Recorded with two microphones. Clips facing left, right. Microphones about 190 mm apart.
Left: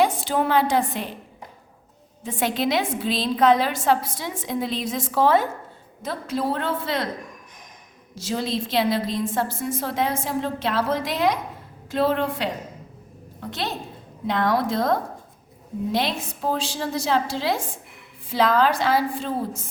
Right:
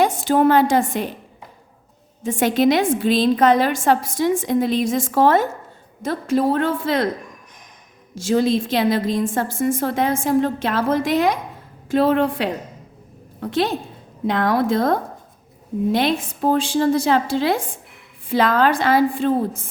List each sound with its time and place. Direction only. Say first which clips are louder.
0.0 s a woman's voice: right 5 dB; 45° right (ahead or behind)
2.2 s a woman's voice: right 7 dB; 50° right (ahead or behind)
8.1 s a woman's voice: right 8 dB; 50° right (ahead or behind)